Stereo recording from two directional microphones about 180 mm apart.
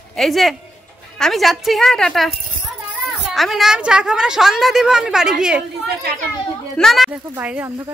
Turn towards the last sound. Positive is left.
turn(degrees=-10)  # may be behind; listen again after turning